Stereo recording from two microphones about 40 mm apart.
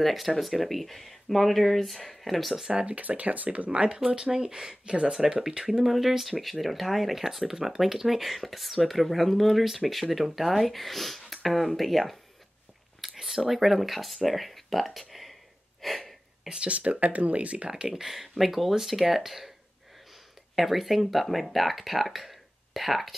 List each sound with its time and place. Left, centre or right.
0.0 s speech: centre
2.7 s speech: right
4.0 s speech: centre
5.9 s speech: centre
13.1 s a sound: centre
13.5 s speech: centre
15.8 s a sound: centre
16.6 s speech: right
17.6 s speech: centre
20.5 s speech: centre